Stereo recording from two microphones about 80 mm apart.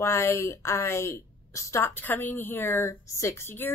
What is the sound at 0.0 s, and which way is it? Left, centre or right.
A woman's voice, left.